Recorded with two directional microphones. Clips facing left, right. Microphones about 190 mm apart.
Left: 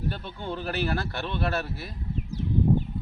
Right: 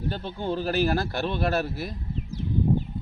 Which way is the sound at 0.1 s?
35° right (ahead or behind).